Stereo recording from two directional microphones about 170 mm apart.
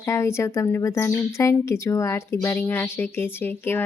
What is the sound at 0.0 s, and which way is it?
Speech, 15° left (ahead or behind).